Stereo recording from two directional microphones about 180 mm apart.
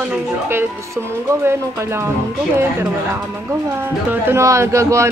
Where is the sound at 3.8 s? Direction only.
10° right (ahead or behind).